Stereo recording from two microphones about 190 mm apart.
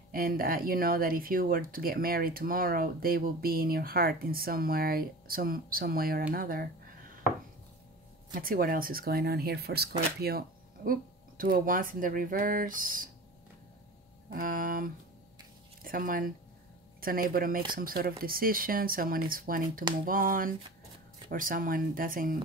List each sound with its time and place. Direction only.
0.1 s speech: 50° right (ahead or behind)
8.3 s speech: 50° right (ahead or behind)
14.3 s speech: 45° right (ahead or behind)